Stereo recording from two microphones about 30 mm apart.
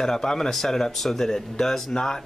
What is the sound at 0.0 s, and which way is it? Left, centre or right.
Speech, centre.